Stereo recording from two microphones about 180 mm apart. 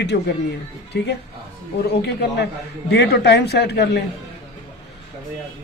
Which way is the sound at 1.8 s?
70° left (ahead or behind).